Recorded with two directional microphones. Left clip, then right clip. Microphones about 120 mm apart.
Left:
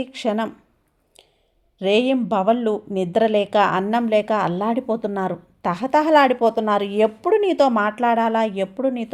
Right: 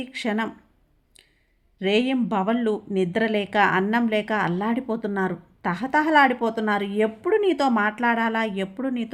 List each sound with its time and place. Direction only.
0.0 s a woman's voice: 30° left (ahead or behind)
1.8 s speech: 35° left (ahead or behind)